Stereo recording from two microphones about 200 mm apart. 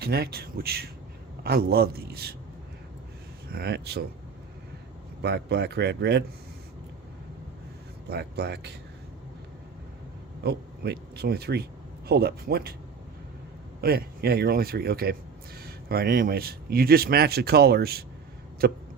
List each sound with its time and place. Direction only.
0.0 s a man's voice: 50° right (ahead or behind)
3.5 s a man's voice: 55° right (ahead or behind)
5.2 s speech: 55° right (ahead or behind)
8.1 s speech: 55° right (ahead or behind)
10.4 s a man's voice: 55° right (ahead or behind)
13.8 s a man's voice: 50° right (ahead or behind)